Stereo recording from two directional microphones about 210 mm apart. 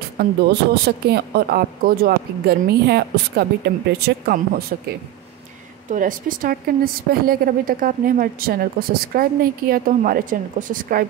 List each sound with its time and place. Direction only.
0.2 s a woman's voice: 50° right (ahead or behind)